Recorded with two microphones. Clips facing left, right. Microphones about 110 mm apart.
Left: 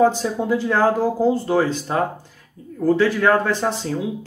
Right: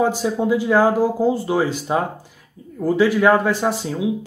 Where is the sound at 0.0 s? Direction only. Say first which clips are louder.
Left 1 dB; 10° right (ahead or behind).